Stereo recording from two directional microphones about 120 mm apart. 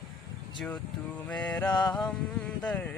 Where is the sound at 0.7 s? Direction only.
15° left (ahead or behind).